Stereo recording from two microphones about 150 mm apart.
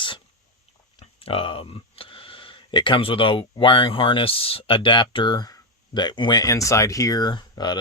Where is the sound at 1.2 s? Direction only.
35° left (ahead or behind).